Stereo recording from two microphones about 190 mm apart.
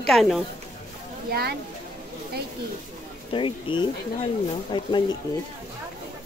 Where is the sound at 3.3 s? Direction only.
25° left (ahead or behind).